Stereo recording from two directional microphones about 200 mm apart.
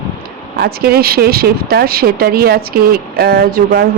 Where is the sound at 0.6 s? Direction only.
50° right (ahead or behind).